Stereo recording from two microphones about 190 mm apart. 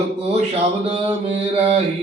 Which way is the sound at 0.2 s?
35° right (ahead or behind).